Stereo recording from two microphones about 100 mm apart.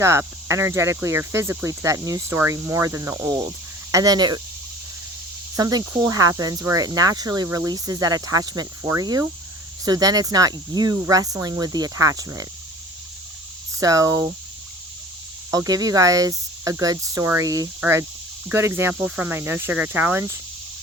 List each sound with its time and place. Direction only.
0.0 s speech: 30° right (ahead or behind)
5.5 s speech: 35° right (ahead or behind)
10.9 s speech: 25° right (ahead or behind)
11.2 s speech: 35° right (ahead or behind)
13.7 s speech: 35° right (ahead or behind)
15.4 s speech: 35° right (ahead or behind)
17.7 s speech: 20° right (ahead or behind)
19.3 s speech: 20° right (ahead or behind)